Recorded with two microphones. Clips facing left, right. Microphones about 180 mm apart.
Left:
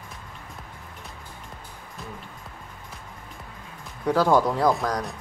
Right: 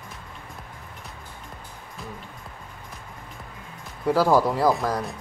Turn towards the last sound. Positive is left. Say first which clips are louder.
# right 1 dB
turn(degrees=0)  # may be behind; listen again after turning